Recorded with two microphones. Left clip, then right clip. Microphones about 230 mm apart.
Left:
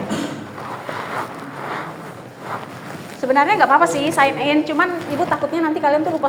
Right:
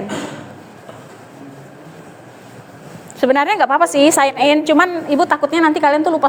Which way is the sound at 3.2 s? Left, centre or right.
Right.